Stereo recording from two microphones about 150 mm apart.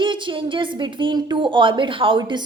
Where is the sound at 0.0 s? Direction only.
35° right (ahead or behind).